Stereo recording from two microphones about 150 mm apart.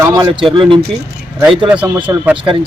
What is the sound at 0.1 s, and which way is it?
Speech, 25° right (ahead or behind).